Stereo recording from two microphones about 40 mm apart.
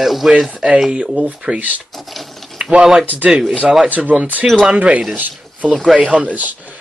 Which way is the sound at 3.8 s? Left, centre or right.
Right.